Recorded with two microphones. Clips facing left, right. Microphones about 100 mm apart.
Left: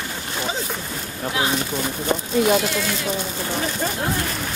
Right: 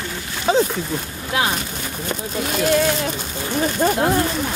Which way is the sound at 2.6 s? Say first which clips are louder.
Right 7 dB; 50° right (ahead or behind).